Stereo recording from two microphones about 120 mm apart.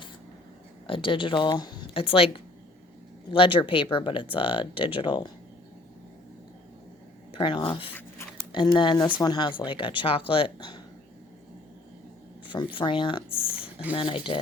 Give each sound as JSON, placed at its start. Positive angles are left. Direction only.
{"t": 0.9, "sound": "speech", "side_deg": 45}
{"t": 1.9, "sound": "speech", "side_deg": 50}
{"t": 7.3, "sound": "speech", "side_deg": 45}
{"t": 12.5, "sound": "speech", "side_deg": 40}